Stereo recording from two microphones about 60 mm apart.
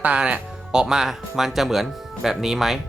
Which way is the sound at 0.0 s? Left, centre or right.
Right.